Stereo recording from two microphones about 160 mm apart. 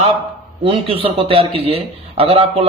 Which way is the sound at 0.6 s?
35° right (ahead or behind).